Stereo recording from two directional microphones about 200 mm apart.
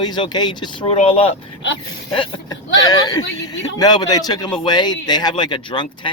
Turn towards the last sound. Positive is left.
turn(degrees=25)  # may be behind; listen again after turning